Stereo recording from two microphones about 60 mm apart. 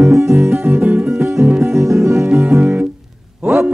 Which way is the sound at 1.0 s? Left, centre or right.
Right.